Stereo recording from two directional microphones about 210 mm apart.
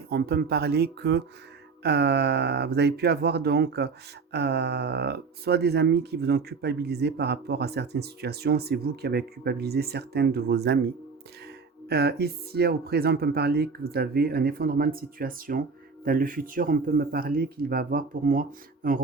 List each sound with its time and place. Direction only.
0.1 s speech: 50° right (ahead or behind)